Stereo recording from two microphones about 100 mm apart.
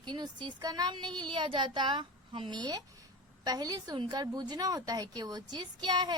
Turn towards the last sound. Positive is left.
turn(degrees=-45)  # may be behind; listen again after turning